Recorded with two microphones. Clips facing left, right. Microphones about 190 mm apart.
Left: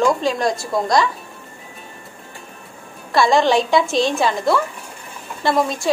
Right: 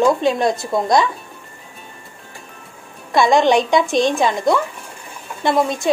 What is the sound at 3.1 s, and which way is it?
A woman's voice, 20° right (ahead or behind).